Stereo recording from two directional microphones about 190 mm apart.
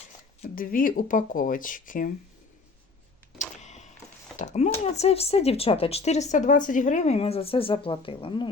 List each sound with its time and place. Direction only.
0.5 s speech: 50° left (ahead or behind)
3.3 s a sound: 40° left (ahead or behind)
4.4 s speech: 40° left (ahead or behind)